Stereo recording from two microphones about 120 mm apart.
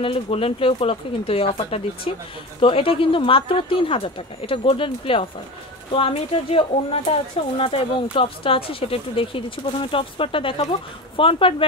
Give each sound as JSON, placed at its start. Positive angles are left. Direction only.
{"t": 0.0, "sound": "speech", "side_deg": 50}